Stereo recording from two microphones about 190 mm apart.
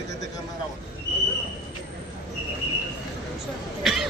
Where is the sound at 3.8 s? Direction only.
Centre (ahead or behind).